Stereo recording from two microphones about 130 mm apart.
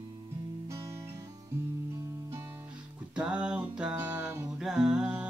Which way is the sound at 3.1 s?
10° right (ahead or behind).